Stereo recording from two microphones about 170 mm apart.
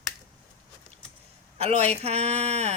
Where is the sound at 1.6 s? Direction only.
40° right (ahead or behind).